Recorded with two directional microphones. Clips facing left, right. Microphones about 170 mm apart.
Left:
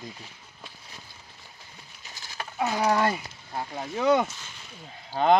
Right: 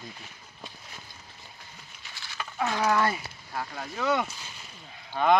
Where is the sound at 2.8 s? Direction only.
30° left (ahead or behind).